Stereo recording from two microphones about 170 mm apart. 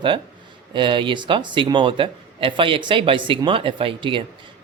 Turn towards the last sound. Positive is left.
turn(degrees=-30)  # may be behind; listen again after turning